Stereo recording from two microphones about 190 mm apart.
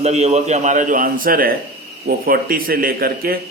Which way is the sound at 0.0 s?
35° right (ahead or behind).